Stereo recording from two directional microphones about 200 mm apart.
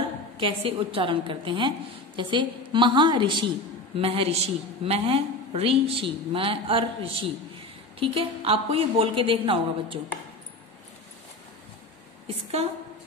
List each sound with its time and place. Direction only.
0.4 s a woman's voice: 25° right (ahead or behind)